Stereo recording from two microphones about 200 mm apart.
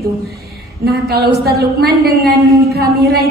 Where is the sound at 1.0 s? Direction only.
50° right (ahead or behind).